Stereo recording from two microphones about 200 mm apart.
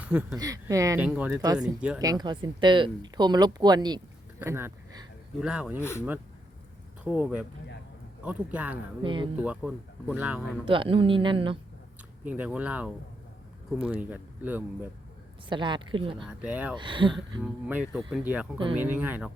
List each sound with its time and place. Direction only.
0.0 s speech: 5° right (ahead or behind)
2.0 s speech: 20° right (ahead or behind)
5.8 s speech: 15° left (ahead or behind)
7.0 s speech: 5° right (ahead or behind)
9.0 s speech: 25° right (ahead or behind)
9.4 s speech: 5° right (ahead or behind)
10.7 s speech: 25° right (ahead or behind)
12.2 s speech: 10° right (ahead or behind)
15.4 s speech: 25° right (ahead or behind)
16.1 s speech: 5° right (ahead or behind)
16.7 s speech: 25° right (ahead or behind)
17.4 s speech: 5° right (ahead or behind)